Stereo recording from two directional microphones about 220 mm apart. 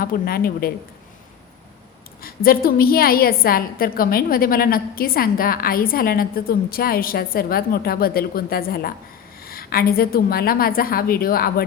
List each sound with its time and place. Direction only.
0.0 s a woman's voice: 40° left (ahead or behind)
2.2 s a woman's voice: 40° left (ahead or behind)